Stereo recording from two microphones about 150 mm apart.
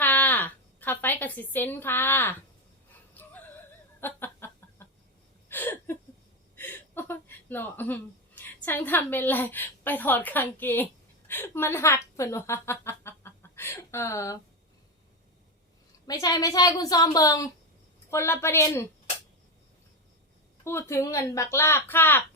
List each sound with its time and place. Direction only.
0.0 s a sound: 10° left (ahead or behind)
3.2 s laughter: 15° left (ahead or behind)
4.0 s chicken: 15° left (ahead or behind)
5.5 s a sound: 15° left (ahead or behind)
6.6 s chuckle: 15° left (ahead or behind)
8.4 s a woman's voice: 10° left (ahead or behind)
16.0 s a woman's voice: 25° left (ahead or behind)
20.7 s a woman's voice: 15° left (ahead or behind)